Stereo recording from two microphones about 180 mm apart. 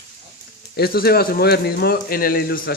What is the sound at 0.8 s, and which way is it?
A man's voice, 60° left (ahead or behind).